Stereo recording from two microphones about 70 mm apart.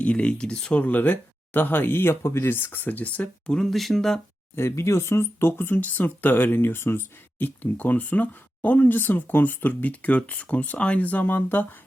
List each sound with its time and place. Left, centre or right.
0.0 s speech: centre
4.5 s speech: left